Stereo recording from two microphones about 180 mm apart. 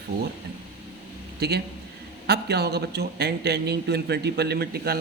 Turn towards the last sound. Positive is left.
turn(degrees=-60)  # may be behind; listen again after turning